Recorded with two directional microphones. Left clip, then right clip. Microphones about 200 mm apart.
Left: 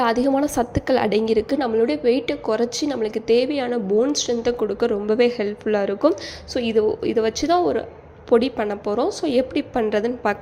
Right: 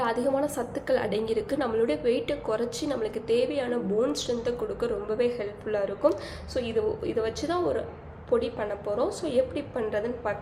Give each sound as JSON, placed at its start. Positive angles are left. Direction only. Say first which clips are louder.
{"t": 0.0, "sound": "a woman's voice", "louder": "left 7 dB", "side_deg": 35}